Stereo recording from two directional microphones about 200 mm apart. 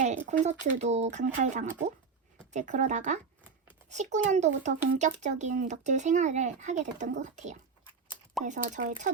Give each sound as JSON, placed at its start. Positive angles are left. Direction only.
{"t": 0.3, "sound": "speech", "side_deg": -35}